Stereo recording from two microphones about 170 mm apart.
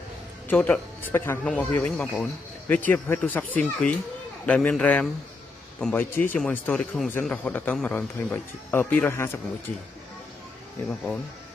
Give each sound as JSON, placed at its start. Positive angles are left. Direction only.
{"t": 0.5, "sound": "speech", "side_deg": 10}